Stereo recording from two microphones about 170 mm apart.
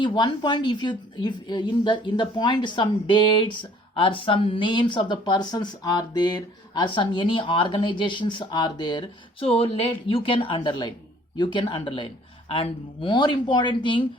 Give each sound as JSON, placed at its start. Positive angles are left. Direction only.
{"t": 0.0, "sound": "a woman's voice", "side_deg": 30}